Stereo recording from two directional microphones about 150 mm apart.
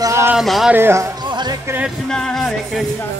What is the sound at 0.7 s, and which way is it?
Speech, 15° right (ahead or behind).